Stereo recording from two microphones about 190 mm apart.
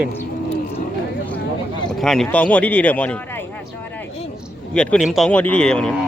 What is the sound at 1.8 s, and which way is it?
Speech, centre (ahead or behind).